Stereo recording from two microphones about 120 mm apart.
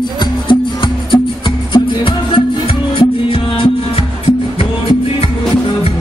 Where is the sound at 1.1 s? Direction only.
45° left (ahead or behind).